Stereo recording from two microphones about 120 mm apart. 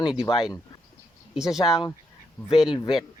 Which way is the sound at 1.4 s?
5° right (ahead or behind).